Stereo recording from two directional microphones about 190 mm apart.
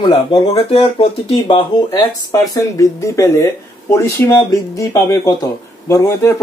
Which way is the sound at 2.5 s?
15° left (ahead or behind).